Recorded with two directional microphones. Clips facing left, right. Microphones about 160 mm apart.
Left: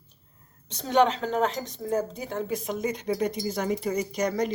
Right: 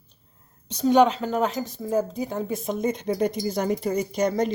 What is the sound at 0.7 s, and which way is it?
A woman's voice, 10° right (ahead or behind).